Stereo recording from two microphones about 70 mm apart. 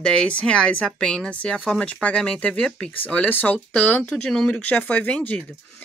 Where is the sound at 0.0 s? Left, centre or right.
Centre.